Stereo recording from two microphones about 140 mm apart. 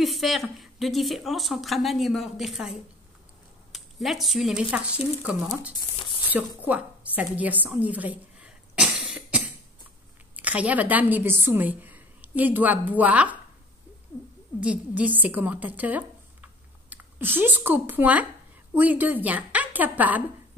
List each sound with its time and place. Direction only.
0.0 s a woman's voice: centre (ahead or behind)
5.9 s a sound: 35° left (ahead or behind)
6.3 s a woman's voice: 10° right (ahead or behind)
7.3 s cough: 10° right (ahead or behind)
10.3 s a woman's voice: 10° right (ahead or behind)
14.6 s a woman's voice: 10° right (ahead or behind)